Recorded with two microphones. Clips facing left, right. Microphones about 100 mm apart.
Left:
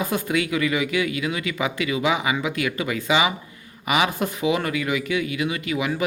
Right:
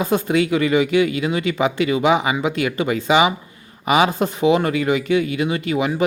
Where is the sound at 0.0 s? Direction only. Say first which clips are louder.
Right 6 dB; 30° right (ahead or behind).